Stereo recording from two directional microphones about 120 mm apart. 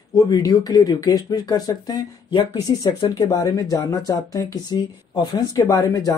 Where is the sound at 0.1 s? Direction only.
35° left (ahead or behind).